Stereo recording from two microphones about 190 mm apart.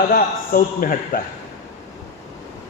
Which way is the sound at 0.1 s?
45° left (ahead or behind).